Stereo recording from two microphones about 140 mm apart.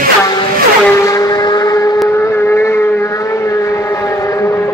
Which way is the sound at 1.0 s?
20° left (ahead or behind).